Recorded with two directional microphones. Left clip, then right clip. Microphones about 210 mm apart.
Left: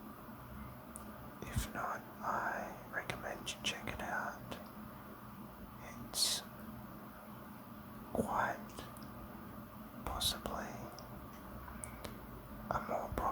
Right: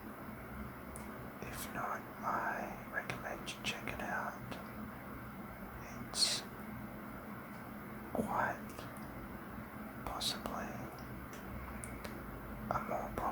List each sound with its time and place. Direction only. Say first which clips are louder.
1.7 s speech: right 1 dB; 15° left (ahead or behind)
3.1 s whispering: even; 15° left (ahead or behind)
6.1 s speech: right 2 dB; 15° left (ahead or behind)
8.1 s whispering: even; 15° left (ahead or behind)
10.0 s whispering: left 1 dB; 15° left (ahead or behind)
12.6 s whispering: even; 15° left (ahead or behind)